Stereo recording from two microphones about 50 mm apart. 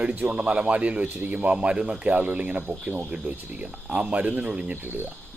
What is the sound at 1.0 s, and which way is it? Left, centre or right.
Speech, right.